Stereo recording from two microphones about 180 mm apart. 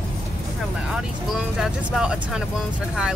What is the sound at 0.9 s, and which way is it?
Speech, 5° right (ahead or behind).